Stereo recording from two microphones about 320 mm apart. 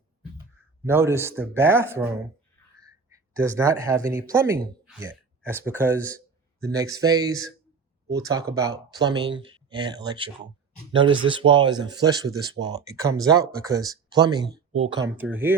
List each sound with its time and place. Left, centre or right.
0.9 s speech: centre
14.4 s a sound: right
14.8 s speech: centre